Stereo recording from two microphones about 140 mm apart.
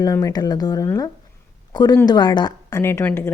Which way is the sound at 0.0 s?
25° left (ahead or behind).